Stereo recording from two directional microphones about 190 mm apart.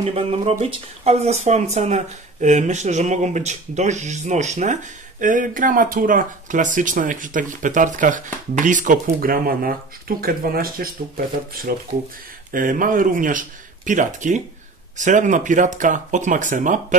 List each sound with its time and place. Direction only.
0.0 s speech: 30° right (ahead or behind)